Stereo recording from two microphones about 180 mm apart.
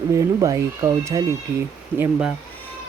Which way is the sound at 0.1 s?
15° right (ahead or behind).